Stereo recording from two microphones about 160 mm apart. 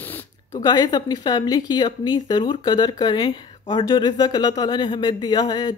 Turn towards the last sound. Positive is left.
turn(degrees=25)  # may be behind; listen again after turning